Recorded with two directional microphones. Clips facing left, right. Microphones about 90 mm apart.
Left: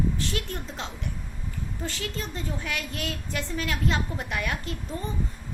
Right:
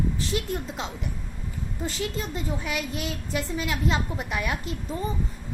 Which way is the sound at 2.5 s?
10° right (ahead or behind).